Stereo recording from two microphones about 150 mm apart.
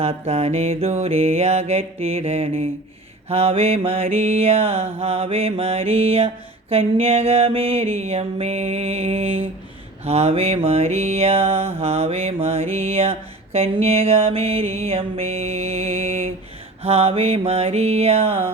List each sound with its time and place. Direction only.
0.0 s mantra: 45° right (ahead or behind)